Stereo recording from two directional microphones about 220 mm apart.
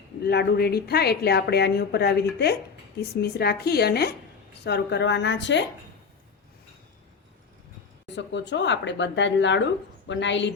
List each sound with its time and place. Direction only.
0.3 s a woman's voice: 45° left (ahead or behind)
8.0 s a woman's voice: 55° left (ahead or behind)